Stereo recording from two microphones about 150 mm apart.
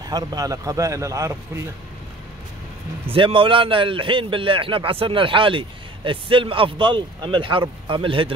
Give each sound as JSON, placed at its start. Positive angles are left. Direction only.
{"t": 0.0, "sound": "a man's voice", "side_deg": -25}
{"t": 3.1, "sound": "a man's voice", "side_deg": -35}